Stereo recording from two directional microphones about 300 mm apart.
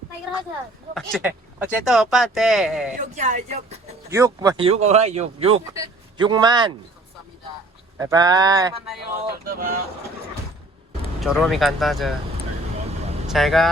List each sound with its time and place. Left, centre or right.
0.9 s speech: centre
3.0 s speech: right
4.1 s speech: centre
7.9 s speech: centre
9.4 s speech: right
11.2 s speech: centre
13.2 s speech: centre